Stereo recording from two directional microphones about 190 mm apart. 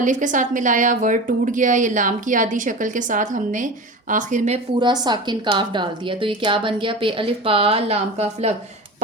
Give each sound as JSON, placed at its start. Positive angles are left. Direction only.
{"t": 0.0, "sound": "a woman's voice", "side_deg": -40}
{"t": 4.8, "sound": "a woman's voice", "side_deg": -20}